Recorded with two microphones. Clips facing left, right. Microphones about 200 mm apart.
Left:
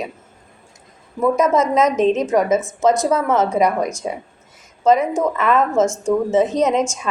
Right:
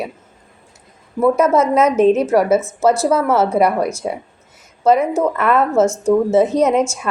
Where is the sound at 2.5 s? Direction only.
15° left (ahead or behind).